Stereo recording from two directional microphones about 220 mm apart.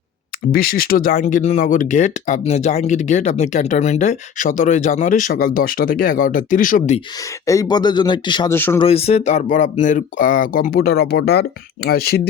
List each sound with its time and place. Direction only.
0.5 s speech: 40° left (ahead or behind)
7.4 s speech: 15° left (ahead or behind)
8.5 s speech: 10° left (ahead or behind)
8.8 s speech: 25° left (ahead or behind); by 12.3 s 45° left (ahead or behind)